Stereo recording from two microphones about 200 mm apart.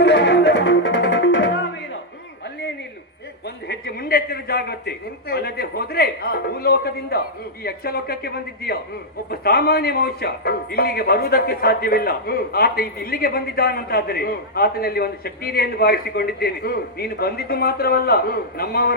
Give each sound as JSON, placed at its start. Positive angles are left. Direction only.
{"t": 0.0, "sound": "music", "side_deg": 60}
{"t": 3.4, "sound": "a man's voice", "side_deg": 55}